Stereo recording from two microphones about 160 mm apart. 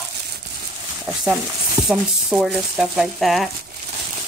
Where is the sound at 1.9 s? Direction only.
Centre (ahead or behind).